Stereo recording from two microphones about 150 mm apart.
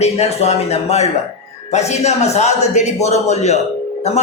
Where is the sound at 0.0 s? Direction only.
45° left (ahead or behind).